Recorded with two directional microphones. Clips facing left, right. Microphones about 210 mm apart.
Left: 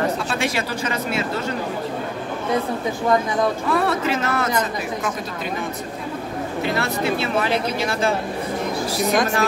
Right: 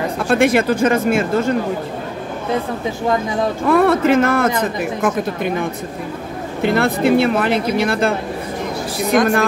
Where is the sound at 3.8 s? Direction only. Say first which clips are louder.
Right 8 dB; 55° right (ahead or behind).